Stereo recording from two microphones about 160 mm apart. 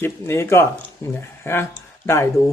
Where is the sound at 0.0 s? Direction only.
15° left (ahead or behind).